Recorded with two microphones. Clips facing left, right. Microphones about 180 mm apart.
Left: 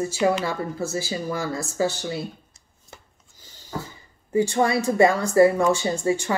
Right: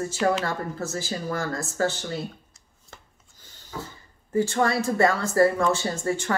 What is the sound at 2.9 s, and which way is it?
Rub, 20° left (ahead or behind).